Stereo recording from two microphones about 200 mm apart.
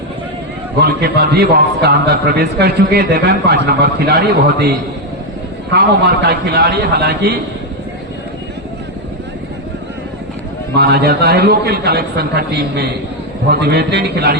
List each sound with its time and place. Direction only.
0.8 s a man's voice: 55° right (ahead or behind)
6.2 s a man's voice: 55° right (ahead or behind)
10.8 s a man's voice: 50° right (ahead or behind)